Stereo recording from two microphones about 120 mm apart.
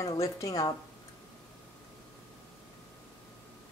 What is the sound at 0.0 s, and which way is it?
Speech, 25° left (ahead or behind).